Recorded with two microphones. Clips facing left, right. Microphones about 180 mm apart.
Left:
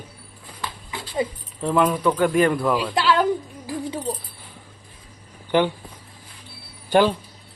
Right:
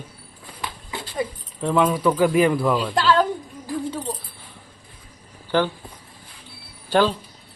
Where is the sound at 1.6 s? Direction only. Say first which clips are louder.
Even; centre (ahead or behind).